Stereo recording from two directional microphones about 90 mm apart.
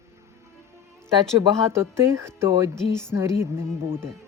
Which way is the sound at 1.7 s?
30° right (ahead or behind).